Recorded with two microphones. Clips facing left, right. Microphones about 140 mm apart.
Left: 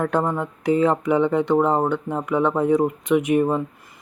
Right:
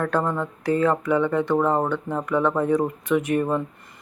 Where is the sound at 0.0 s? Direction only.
15° left (ahead or behind).